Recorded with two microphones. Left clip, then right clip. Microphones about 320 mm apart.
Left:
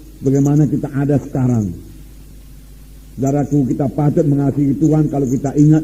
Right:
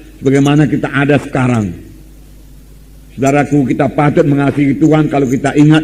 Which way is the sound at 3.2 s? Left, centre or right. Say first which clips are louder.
Right 6 dB; right.